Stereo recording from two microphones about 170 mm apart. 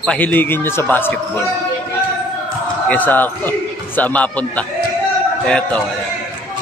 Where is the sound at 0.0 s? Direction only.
5° left (ahead or behind).